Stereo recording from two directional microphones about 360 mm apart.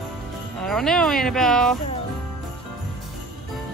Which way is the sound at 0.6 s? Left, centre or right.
Centre.